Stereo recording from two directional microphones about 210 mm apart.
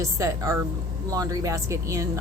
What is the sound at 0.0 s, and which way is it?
Speech, 15° right (ahead or behind).